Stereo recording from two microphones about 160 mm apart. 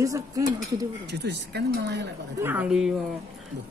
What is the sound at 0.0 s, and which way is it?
Speech, 20° right (ahead or behind).